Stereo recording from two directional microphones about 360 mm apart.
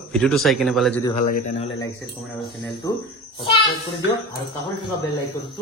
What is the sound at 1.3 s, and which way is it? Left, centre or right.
Speech, left.